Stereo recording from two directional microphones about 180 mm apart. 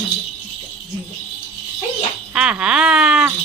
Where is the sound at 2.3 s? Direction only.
5° right (ahead or behind).